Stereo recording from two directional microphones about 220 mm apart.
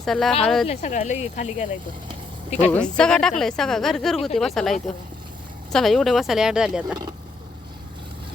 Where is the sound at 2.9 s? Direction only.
5° left (ahead or behind).